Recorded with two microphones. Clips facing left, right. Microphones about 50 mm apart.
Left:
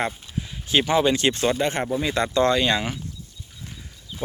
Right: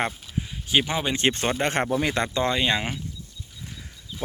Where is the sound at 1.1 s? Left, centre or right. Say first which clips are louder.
Left 3 dB; right.